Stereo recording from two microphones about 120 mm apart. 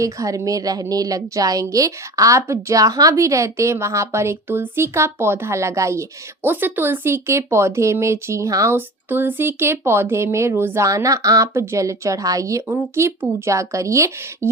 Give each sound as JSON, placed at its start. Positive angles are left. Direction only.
{"t": 0.0, "sound": "a woman's voice", "side_deg": -25}